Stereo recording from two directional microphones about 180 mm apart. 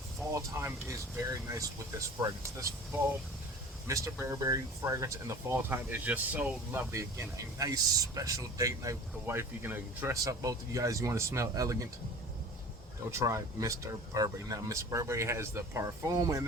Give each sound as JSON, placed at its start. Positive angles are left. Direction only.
{"t": 0.3, "sound": "speech", "side_deg": -15}
{"t": 3.8, "sound": "speech", "side_deg": -15}
{"t": 13.1, "sound": "speech", "side_deg": -15}